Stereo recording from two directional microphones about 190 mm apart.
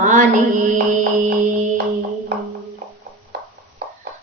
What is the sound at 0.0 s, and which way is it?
Music, 40° right (ahead or behind).